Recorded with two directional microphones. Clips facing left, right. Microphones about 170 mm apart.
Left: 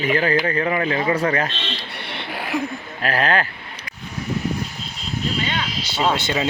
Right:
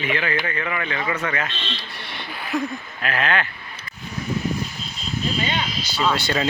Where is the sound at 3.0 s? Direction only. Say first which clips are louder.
Left 3 dB; 35° left (ahead or behind).